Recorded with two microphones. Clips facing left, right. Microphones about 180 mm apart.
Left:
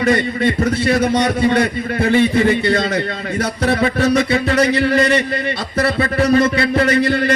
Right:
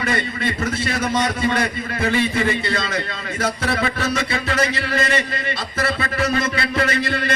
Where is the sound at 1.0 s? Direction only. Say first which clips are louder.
Left 5 dB; 30° left (ahead or behind).